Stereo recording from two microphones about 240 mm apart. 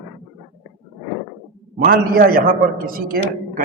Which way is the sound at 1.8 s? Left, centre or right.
Right.